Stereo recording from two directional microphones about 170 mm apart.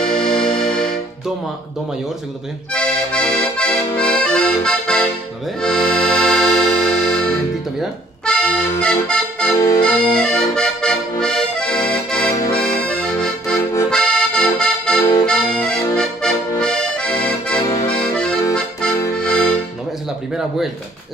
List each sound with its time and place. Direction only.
0.0 s music: 5° left (ahead or behind)
2.7 s accordion: 5° left (ahead or behind)
8.3 s accordion: 5° left (ahead or behind)
17.6 s accordion: 20° left (ahead or behind)
17.9 s accordion: 5° left (ahead or behind)